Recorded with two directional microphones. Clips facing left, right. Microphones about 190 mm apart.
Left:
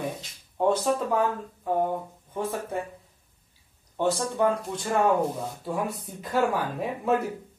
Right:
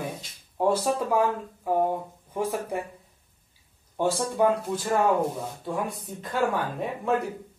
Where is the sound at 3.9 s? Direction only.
10° right (ahead or behind).